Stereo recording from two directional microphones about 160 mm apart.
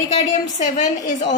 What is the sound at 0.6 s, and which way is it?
Speech, 50° left (ahead or behind).